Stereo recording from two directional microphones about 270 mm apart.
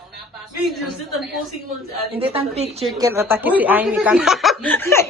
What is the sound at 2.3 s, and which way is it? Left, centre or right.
Speech, right.